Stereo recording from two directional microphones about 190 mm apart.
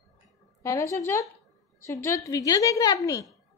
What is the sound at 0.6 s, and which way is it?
A woman's voice, 15° left (ahead or behind).